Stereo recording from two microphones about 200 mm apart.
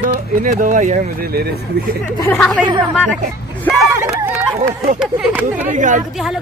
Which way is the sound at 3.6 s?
Centre (ahead or behind).